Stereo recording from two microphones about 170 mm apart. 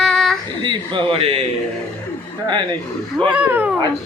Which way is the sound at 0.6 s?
30° right (ahead or behind).